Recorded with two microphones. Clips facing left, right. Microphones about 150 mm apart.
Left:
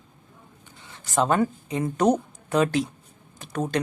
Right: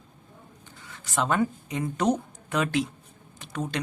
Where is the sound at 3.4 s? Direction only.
45° left (ahead or behind).